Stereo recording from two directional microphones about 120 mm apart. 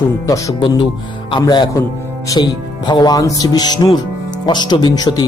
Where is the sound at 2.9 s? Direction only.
35° left (ahead or behind).